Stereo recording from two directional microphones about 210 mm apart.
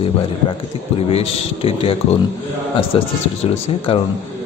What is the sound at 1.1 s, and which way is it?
Speech, 30° left (ahead or behind).